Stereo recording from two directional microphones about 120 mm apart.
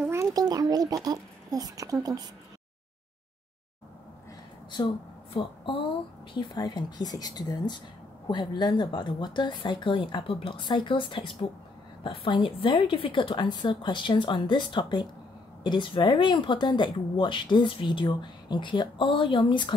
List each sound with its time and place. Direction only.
0.1 s a child's voice: 25° right (ahead or behind)
5.3 s speech: 45° left (ahead or behind)
6.3 s speech: 35° left (ahead or behind)